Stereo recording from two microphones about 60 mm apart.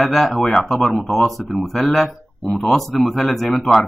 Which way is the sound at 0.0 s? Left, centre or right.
Centre.